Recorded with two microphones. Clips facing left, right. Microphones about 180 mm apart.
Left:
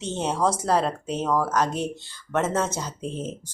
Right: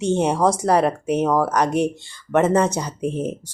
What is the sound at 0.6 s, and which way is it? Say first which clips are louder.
Speech: right 5 dB; 70° right (ahead or behind).